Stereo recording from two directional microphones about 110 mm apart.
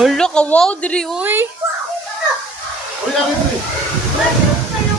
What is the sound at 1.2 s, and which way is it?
Speech, 20° right (ahead or behind).